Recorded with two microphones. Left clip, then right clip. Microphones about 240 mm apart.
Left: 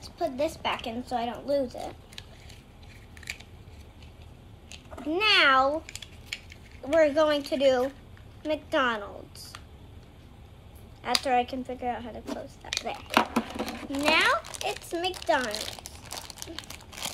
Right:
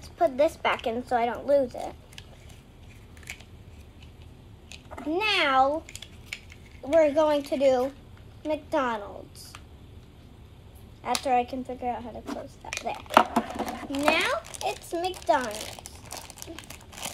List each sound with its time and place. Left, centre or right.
0.2 s a woman's voice: centre
1.4 s speech: centre
4.6 s typing: centre
7.1 s a woman's voice: centre
11.3 s a woman's voice: centre
12.4 s speech: centre
13.2 s a sound: centre
13.9 s a woman's voice: centre
15.7 s crumpling: centre